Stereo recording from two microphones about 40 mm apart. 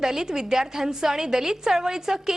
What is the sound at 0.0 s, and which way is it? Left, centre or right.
A woman's voice, centre.